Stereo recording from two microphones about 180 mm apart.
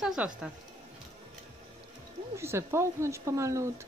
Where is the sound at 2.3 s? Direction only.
15° right (ahead or behind).